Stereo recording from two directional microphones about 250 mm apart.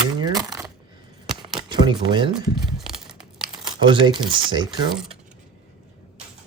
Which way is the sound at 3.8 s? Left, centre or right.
Centre.